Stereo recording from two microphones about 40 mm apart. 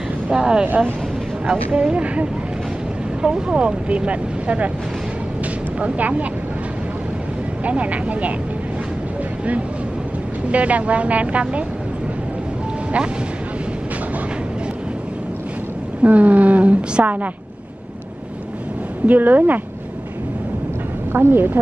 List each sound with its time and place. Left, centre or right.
0.3 s speech: right
5.8 s a woman's voice: right
7.6 s a woman's voice: right
10.5 s a woman's voice: right
16.0 s a woman's voice: right
19.0 s speech: right
21.1 s a woman's voice: right